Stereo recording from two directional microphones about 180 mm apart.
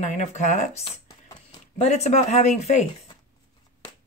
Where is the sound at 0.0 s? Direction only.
40° left (ahead or behind).